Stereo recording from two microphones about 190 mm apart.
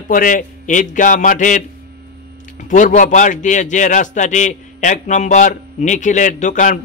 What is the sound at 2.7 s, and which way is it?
A man's voice, 40° left (ahead or behind).